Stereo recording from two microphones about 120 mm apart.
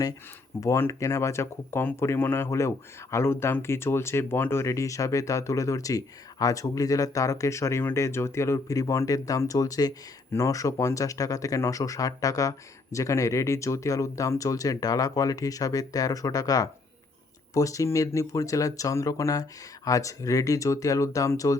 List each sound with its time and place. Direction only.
0.6 s speech: 25° left (ahead or behind)